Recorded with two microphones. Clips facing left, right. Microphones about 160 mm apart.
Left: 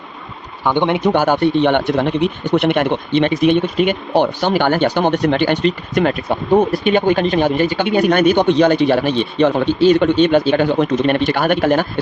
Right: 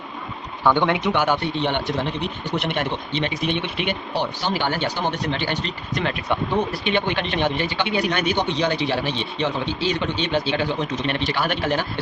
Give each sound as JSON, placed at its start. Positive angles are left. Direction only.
{"t": 0.6, "sound": "speech", "side_deg": 20}
{"t": 0.9, "sound": "speech", "side_deg": 40}